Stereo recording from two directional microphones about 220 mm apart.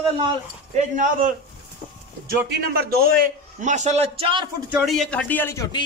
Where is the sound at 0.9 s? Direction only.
35° right (ahead or behind).